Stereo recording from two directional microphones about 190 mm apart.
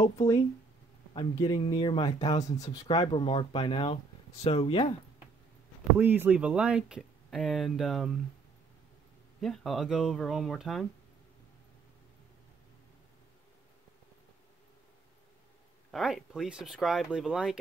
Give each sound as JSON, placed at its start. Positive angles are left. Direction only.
{"t": 1.1, "sound": "speech", "side_deg": 25}
{"t": 5.9, "sound": "speech", "side_deg": -10}
{"t": 9.4, "sound": "speech", "side_deg": 0}
{"t": 15.9, "sound": "speech", "side_deg": 0}